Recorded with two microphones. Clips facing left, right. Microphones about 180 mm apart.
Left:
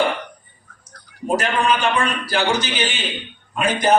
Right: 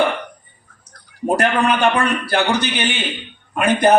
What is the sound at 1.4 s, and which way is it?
A man's voice, 60° right (ahead or behind).